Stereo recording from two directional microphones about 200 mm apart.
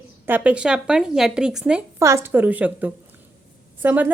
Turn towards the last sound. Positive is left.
turn(degrees=-10)  # may be behind; listen again after turning